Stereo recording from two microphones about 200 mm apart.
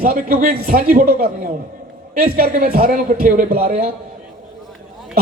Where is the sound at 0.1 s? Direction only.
45° right (ahead or behind).